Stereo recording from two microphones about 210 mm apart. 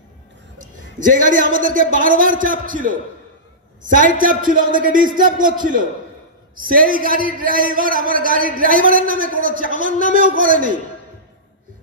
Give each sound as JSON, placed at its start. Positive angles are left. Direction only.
{"t": 0.7, "sound": "a man's voice", "side_deg": -40}